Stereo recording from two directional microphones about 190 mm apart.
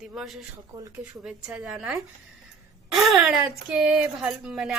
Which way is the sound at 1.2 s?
5° right (ahead or behind).